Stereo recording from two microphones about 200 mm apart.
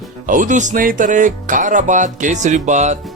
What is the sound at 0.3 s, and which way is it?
Speech, 40° right (ahead or behind).